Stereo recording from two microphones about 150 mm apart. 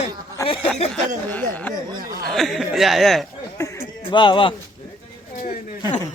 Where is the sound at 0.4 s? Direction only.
35° left (ahead or behind).